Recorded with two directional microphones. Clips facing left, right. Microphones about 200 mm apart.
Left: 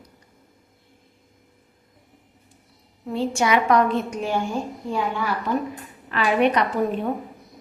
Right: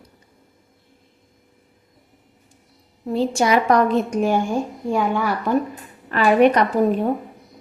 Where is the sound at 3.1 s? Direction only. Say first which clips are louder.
Right 3 dB; 35° right (ahead or behind).